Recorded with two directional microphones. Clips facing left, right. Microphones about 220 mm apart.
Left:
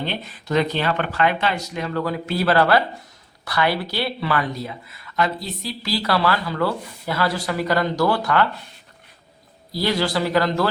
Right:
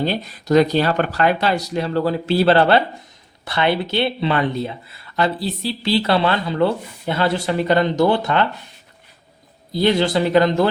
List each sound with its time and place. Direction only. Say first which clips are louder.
0.0 s speech: right 6 dB; 40° right (ahead or behind); by 8.4 s 20° right (ahead or behind)
9.7 s speech: right 5 dB; 20° right (ahead or behind)